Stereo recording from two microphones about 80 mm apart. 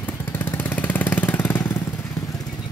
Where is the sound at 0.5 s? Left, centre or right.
Left.